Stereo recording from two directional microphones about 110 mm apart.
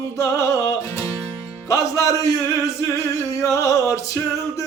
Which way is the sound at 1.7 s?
30° left (ahead or behind).